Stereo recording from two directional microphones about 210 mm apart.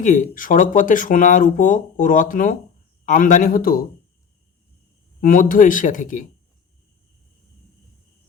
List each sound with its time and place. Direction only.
0.0 s speech: 40° left (ahead or behind)
5.2 s speech: 40° left (ahead or behind)